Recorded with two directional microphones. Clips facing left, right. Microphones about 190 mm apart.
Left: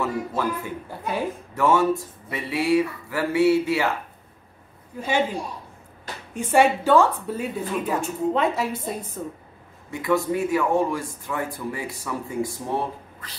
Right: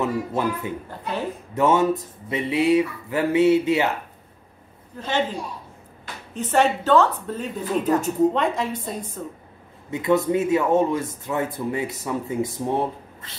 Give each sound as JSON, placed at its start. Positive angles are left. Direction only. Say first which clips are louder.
{"t": 0.0, "sound": "speech", "louder": "right 2 dB", "side_deg": -20}
{"t": 0.8, "sound": "a woman's voice", "louder": "left 1 dB", "side_deg": 10}
{"t": 1.5, "sound": "speech", "louder": "right 1 dB", "side_deg": -20}
{"t": 4.9, "sound": "a woman's voice", "louder": "left 1 dB", "side_deg": 10}
{"t": 6.3, "sound": "a woman's voice", "louder": "left 1 dB", "side_deg": 10}
{"t": 9.8, "sound": "speech", "louder": "right 3 dB", "side_deg": -20}